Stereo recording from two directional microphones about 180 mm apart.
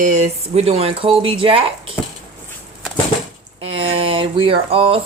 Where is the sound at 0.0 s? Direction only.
40° right (ahead or behind).